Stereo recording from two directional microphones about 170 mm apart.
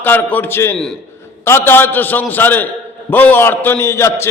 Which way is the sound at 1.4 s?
15° left (ahead or behind).